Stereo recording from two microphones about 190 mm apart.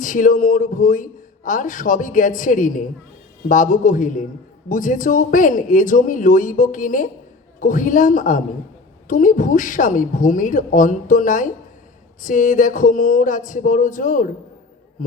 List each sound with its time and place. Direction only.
0.0 s a woman's voice: 45° left (ahead or behind)